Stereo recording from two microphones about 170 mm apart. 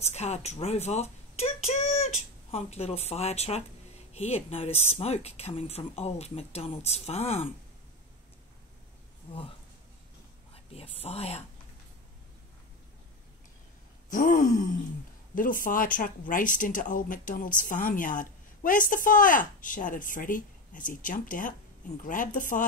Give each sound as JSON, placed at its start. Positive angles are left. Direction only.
{"t": 0.0, "sound": "speech", "side_deg": 40}
{"t": 10.5, "sound": "speech", "side_deg": 35}
{"t": 14.1, "sound": "speech", "side_deg": 50}